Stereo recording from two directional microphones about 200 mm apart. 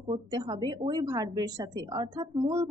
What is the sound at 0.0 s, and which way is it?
Speech, 20° right (ahead or behind).